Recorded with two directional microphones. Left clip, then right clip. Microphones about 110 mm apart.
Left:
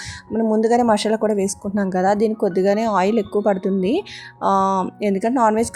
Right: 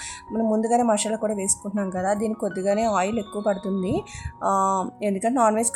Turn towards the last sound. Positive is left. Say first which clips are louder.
# left 3 dB
turn(degrees=25)  # may be behind; listen again after turning